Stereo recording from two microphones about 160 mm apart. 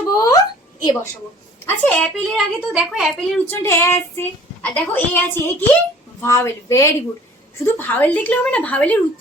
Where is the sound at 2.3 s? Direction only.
Centre (ahead or behind).